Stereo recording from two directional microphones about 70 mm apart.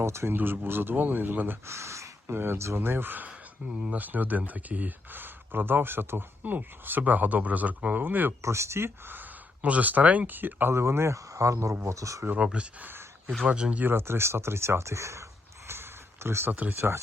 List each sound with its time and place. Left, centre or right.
0.0 s speech: right
0.3 s speech: right
1.6 s gasp: right
2.4 s speech: right
8.4 s speech: right
12.6 s speech: centre
13.8 s speech: right
16.2 s speech: right
16.5 s speech: right